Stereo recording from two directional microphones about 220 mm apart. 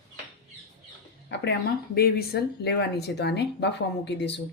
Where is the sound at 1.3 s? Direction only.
50° left (ahead or behind).